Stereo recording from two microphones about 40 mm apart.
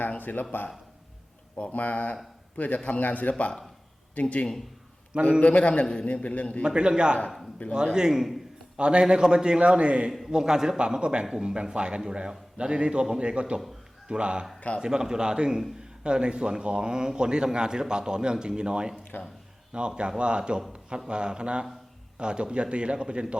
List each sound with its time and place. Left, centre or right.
0.2 s speech: left
1.7 s a man's voice: left
6.2 s a man's voice: left
6.6 s speech: right
7.6 s speech: left
7.9 s a man's voice: centre
9.6 s speech: right
10.1 s a man's voice: centre
10.3 s a man's voice: centre
11.3 s a man's voice: centre
20.0 s speech: right